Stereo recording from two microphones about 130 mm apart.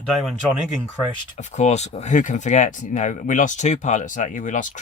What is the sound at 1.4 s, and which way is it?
Speech, 60° left (ahead or behind).